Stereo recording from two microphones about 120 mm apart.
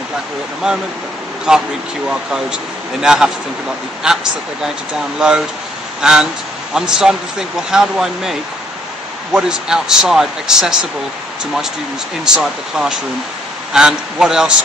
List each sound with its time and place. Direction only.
1.5 s speech: 5° right (ahead or behind)
12.4 s speech: 5° right (ahead or behind)